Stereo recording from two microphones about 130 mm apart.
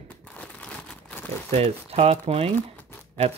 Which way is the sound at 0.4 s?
10° left (ahead or behind).